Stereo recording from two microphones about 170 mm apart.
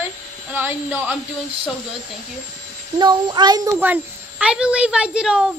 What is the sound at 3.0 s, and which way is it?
Speech, 25° right (ahead or behind).